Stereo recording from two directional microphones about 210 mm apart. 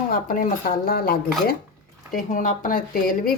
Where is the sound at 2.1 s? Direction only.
40° left (ahead or behind).